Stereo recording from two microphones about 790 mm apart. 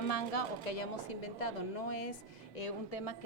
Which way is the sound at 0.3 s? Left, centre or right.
Left.